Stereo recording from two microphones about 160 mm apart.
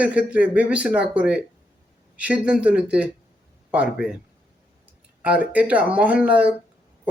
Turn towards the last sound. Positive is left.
turn(degrees=-10)  # may be behind; listen again after turning